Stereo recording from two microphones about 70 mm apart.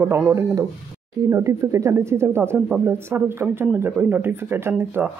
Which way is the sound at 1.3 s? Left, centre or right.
Right.